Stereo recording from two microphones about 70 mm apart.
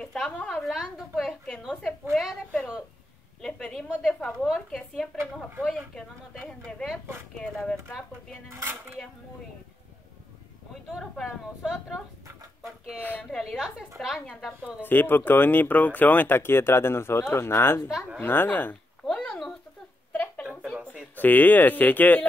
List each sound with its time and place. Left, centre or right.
0.0 s a woman's voice: centre
0.7 s speech: centre
3.3 s a woman's voice: centre
8.5 s dishes: right
10.7 s speech: centre
13.0 s speech: left
13.4 s speech: centre
14.8 s speech: left
17.8 s speech: centre
18.2 s speech: left
19.0 s a sound: centre
20.1 s a sound: left
21.2 s speech: left